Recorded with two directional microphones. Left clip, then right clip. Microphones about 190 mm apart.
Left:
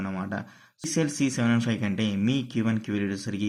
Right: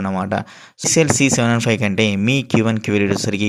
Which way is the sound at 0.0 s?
35° right (ahead or behind).